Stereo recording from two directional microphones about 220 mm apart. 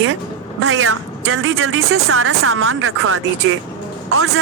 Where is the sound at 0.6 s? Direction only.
70° right (ahead or behind).